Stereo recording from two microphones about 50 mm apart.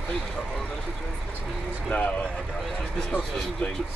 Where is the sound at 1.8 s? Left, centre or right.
Left.